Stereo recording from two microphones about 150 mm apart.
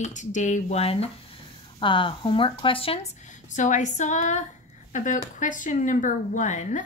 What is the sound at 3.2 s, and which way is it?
Speech, 55° left (ahead or behind).